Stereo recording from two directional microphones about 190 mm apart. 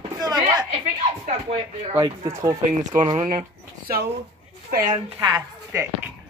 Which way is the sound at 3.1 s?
40° right (ahead or behind).